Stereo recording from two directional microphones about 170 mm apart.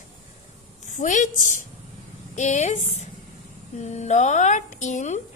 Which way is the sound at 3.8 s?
40° left (ahead or behind).